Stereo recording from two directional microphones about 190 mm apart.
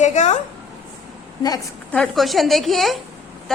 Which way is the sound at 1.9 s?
Centre (ahead or behind).